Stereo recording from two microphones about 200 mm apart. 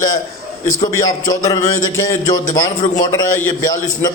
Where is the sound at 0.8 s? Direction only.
15° left (ahead or behind).